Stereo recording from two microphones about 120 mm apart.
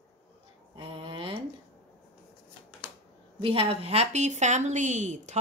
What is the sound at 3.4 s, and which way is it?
A woman's voice, 50° right (ahead or behind).